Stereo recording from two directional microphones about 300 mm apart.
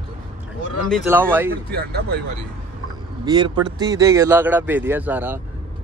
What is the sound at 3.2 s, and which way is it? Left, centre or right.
Speech, centre.